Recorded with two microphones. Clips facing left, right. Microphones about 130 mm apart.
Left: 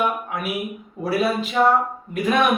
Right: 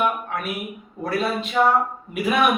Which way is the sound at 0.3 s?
5° left (ahead or behind).